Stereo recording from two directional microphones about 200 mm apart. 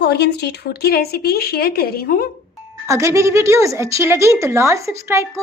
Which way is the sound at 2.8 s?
15° right (ahead or behind).